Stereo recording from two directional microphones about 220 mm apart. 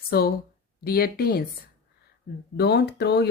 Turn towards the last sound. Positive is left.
turn(degrees=50)  # may be behind; listen again after turning